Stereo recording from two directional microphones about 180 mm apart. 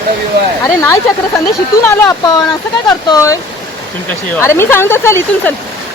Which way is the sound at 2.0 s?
20° left (ahead or behind).